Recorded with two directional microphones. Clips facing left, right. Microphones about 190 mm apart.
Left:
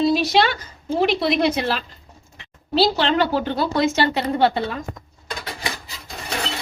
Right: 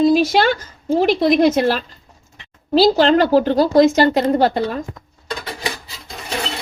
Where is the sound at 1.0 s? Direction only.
45° right (ahead or behind).